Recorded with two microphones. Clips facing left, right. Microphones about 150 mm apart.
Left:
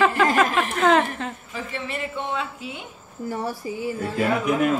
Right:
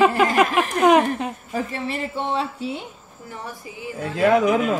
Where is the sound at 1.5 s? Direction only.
35° right (ahead or behind).